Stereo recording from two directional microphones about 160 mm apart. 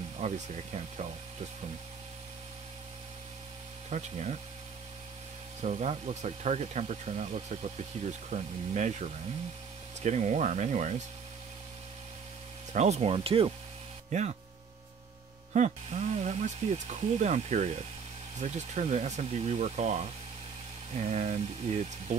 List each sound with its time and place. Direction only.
0.2 s speech: 45° right (ahead or behind)
3.9 s speech: 45° right (ahead or behind)
5.6 s speech: 45° right (ahead or behind)
12.7 s speech: 45° right (ahead or behind)
15.5 s speech: 45° right (ahead or behind)